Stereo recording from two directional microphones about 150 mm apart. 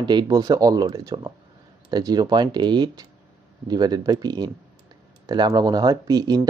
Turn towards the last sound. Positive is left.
turn(degrees=-25)  # may be behind; listen again after turning